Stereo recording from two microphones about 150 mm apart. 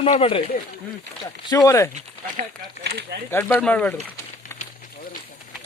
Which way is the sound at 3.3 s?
15° left (ahead or behind).